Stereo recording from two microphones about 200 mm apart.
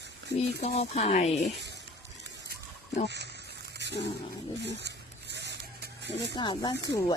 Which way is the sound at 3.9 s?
60° left (ahead or behind).